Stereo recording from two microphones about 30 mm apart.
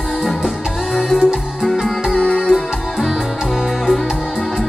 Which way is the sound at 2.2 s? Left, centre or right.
Left.